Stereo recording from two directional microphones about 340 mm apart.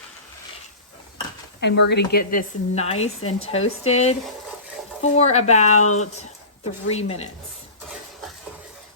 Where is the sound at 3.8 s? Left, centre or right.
Centre.